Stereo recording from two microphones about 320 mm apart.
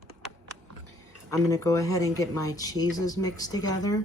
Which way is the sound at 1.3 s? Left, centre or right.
Centre.